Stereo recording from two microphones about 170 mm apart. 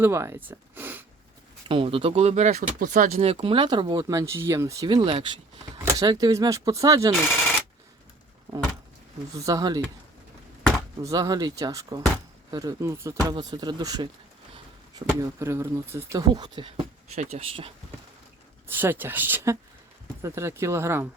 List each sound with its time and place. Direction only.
0.0 s speech: 15° right (ahead or behind)
1.6 s speech: 30° right (ahead or behind)
7.2 s telephone bell ringing: 10° left (ahead or behind)
9.3 s speech: 20° right (ahead or behind)
11.0 s speech: 20° right (ahead or behind)
17.2 s speech: 40° right (ahead or behind)
18.7 s speech: 10° right (ahead or behind)